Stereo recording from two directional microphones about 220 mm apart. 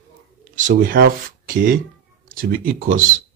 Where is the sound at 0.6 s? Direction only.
40° right (ahead or behind).